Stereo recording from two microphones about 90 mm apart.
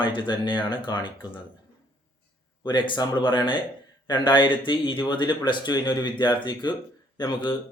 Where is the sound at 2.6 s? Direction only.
60° left (ahead or behind).